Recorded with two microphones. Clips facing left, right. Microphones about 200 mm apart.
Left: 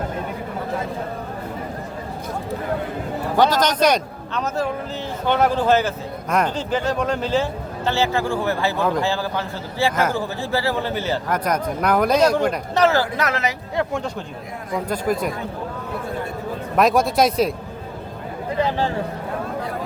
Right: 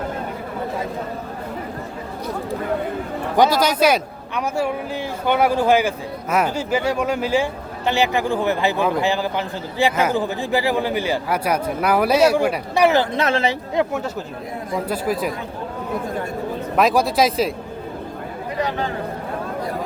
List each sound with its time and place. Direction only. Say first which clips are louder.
3.3 s speech: right 1 dB; 10° right (ahead or behind); by 13.6 s 30° right (ahead or behind)
13.7 s speech: right 2 dB; 5° right (ahead or behind)
16.7 s speech: even; centre (ahead or behind)
18.6 s speech: left 2 dB; 30° left (ahead or behind)